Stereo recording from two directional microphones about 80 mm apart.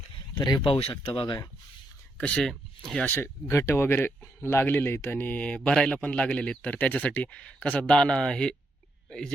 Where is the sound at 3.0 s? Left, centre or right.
Left.